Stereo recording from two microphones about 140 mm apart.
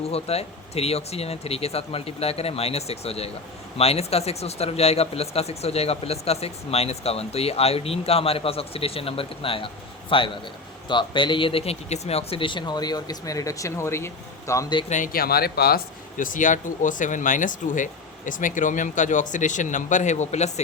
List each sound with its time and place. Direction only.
0.0 s a man's voice: 45° left (ahead or behind); by 14.7 s 20° left (ahead or behind)
14.8 s speech: 65° left (ahead or behind)